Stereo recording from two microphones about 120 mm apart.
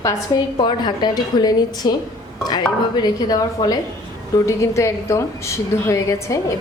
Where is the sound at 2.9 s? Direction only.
35° left (ahead or behind).